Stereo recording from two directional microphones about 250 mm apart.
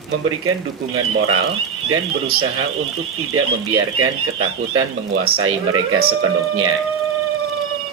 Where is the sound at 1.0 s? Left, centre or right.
Right.